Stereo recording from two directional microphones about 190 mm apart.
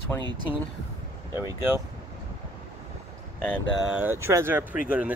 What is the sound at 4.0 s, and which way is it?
Speech, 15° right (ahead or behind).